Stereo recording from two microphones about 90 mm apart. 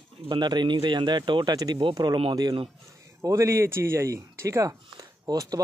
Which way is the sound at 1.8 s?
60° right (ahead or behind).